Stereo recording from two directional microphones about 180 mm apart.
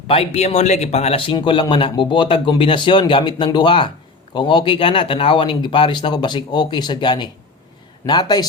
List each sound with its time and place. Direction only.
0.1 s a man's voice: 30° left (ahead or behind)